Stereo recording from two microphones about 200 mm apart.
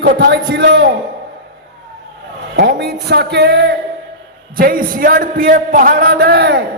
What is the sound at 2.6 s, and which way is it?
A man's voice, 55° right (ahead or behind).